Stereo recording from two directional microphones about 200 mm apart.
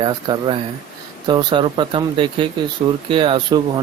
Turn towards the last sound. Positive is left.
turn(degrees=-25)  # may be behind; listen again after turning